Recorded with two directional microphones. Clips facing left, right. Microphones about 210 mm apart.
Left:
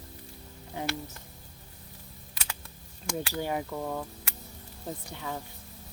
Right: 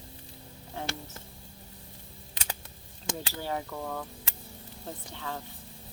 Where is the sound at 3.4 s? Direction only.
15° left (ahead or behind).